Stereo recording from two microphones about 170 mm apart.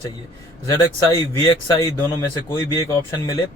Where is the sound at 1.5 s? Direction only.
20° left (ahead or behind).